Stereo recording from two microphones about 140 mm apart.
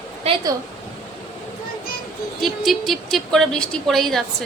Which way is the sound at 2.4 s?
Centre (ahead or behind).